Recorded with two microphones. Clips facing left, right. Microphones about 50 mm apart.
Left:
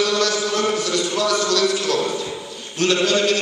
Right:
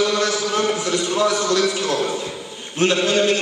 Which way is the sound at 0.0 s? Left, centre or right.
Right.